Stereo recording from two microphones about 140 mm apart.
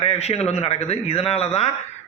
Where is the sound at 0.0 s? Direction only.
50° left (ahead or behind).